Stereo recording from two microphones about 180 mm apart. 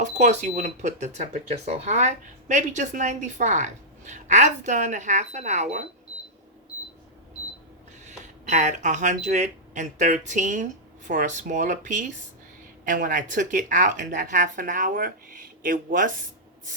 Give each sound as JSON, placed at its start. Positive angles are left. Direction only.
{"t": 0.0, "sound": "speech", "side_deg": -40}
{"t": 8.0, "sound": "speech", "side_deg": -40}